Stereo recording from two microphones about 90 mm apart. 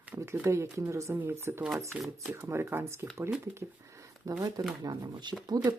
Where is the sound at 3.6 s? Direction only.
35° right (ahead or behind).